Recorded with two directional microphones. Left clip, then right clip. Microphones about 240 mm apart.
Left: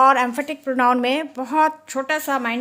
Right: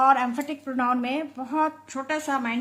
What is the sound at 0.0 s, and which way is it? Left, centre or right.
A woman's voice, left.